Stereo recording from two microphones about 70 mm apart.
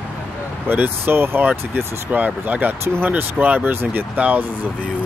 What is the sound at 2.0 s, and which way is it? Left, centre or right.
Speech, right.